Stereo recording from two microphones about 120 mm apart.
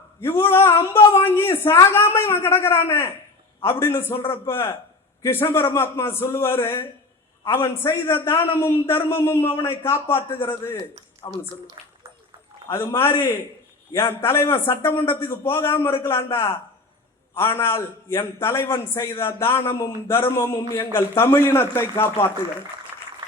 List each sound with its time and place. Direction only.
0.2 s speech: 20° left (ahead or behind)
11.2 s speech: 35° left (ahead or behind)
12.6 s speech: 25° left (ahead or behind)